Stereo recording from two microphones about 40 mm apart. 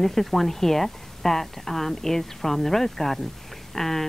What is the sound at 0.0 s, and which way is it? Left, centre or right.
Speech, centre.